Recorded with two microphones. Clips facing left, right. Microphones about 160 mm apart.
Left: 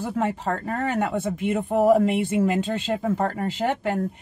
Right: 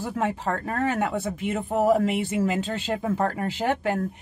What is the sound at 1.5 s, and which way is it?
Speech, 10° left (ahead or behind).